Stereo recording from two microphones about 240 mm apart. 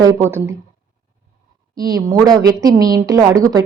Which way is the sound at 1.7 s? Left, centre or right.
Centre.